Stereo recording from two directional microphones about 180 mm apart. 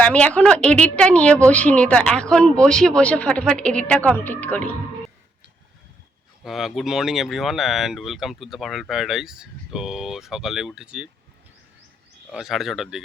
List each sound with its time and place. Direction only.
0.0 s a woman's voice: 5° left (ahead or behind)
6.4 s speech: centre (ahead or behind)
12.3 s speech: centre (ahead or behind)